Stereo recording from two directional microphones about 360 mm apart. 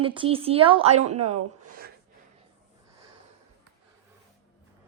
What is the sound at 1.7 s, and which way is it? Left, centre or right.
Gasp, right.